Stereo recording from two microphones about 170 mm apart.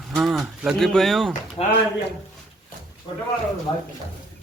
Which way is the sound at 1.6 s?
35° left (ahead or behind).